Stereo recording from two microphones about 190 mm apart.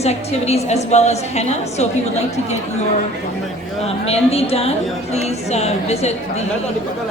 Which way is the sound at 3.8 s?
30° left (ahead or behind).